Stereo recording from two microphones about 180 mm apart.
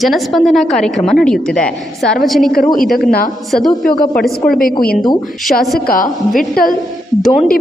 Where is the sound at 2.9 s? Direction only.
55° left (ahead or behind).